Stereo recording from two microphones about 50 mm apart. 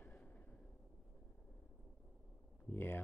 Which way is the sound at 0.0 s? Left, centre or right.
Left.